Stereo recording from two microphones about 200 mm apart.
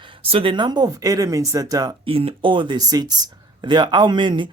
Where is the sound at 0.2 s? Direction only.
25° right (ahead or behind).